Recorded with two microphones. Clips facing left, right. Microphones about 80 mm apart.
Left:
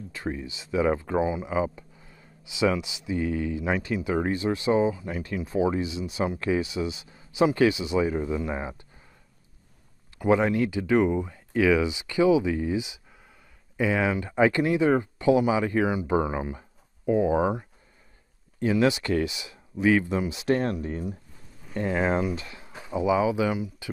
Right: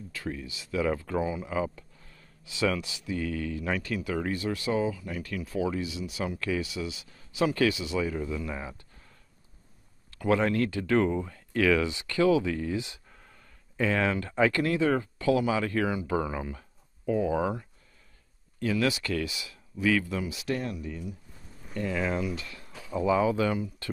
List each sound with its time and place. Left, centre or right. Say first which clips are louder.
0.1 s speech: left 4 dB; left
10.1 s speech: left 3 dB; centre
20.6 s speech: left 6 dB; left
21.7 s speech: left 5 dB; left
22.9 s speech: left 2 dB; centre